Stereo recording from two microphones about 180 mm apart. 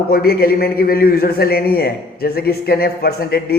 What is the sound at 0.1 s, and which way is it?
A man's voice, 55° left (ahead or behind).